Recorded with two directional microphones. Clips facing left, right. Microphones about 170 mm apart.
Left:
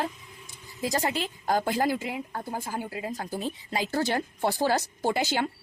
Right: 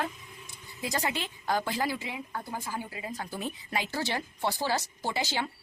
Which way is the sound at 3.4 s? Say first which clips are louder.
Left 1 dB; 30° left (ahead or behind).